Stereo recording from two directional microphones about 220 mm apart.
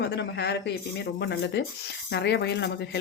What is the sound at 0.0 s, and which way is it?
Speech, 50° left (ahead or behind).